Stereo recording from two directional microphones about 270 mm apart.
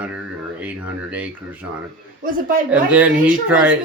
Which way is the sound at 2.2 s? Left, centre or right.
Right.